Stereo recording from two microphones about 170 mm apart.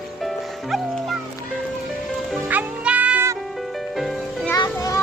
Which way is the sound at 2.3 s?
10° right (ahead or behind).